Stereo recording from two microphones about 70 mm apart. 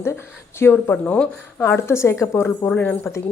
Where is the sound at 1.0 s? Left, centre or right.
Centre.